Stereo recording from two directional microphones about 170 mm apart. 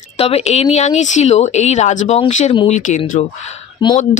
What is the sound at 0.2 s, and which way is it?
Speech, 40° left (ahead or behind).